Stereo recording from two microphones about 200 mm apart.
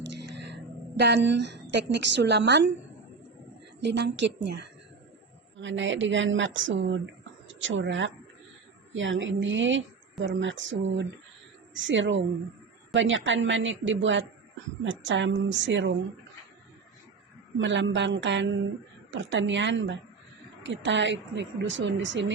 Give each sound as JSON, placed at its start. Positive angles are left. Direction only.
{"t": 0.2, "sound": "a woman's voice", "side_deg": -60}
{"t": 3.8, "sound": "speech", "side_deg": -60}
{"t": 17.6, "sound": "speech", "side_deg": -65}